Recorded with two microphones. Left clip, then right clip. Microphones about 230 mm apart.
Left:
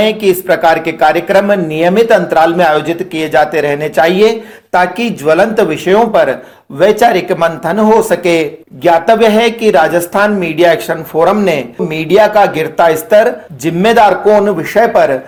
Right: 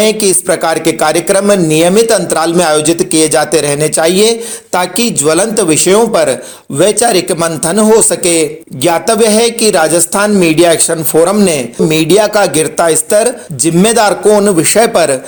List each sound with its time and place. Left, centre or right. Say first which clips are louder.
0.0 s speech: even; right
10.1 s speech: right 2 dB; right
14.4 s speech: right 1 dB; right